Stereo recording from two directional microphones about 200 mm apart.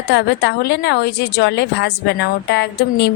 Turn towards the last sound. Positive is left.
turn(degrees=55)  # may be behind; listen again after turning